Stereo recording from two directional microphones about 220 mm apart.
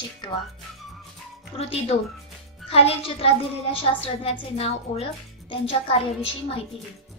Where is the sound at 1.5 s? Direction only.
25° left (ahead or behind).